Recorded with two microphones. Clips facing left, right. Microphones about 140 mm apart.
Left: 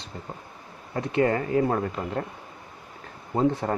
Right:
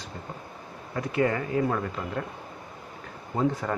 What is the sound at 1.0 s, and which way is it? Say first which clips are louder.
Speech: left 2 dB; 30° left (ahead or behind).